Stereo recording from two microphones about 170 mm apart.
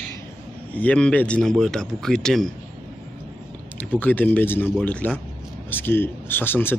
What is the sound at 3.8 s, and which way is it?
Speech, 10° left (ahead or behind).